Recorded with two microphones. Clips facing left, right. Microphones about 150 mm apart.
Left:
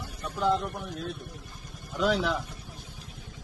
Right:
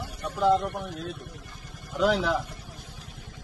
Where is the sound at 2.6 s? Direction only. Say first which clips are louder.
Right 1 dB; 90° right.